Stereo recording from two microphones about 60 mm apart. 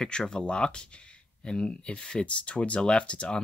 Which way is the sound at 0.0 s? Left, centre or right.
Centre.